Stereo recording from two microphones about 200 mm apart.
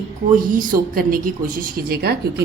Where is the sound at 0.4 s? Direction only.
45° right (ahead or behind).